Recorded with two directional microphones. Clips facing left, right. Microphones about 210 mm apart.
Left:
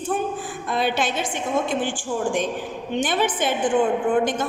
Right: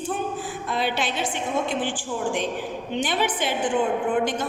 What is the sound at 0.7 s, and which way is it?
Speech, 50° left (ahead or behind).